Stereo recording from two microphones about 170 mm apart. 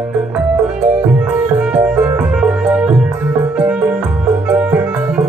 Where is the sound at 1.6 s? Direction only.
5° right (ahead or behind).